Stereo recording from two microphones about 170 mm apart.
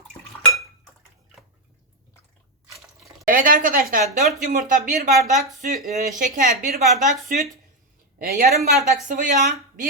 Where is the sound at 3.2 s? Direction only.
55° right (ahead or behind).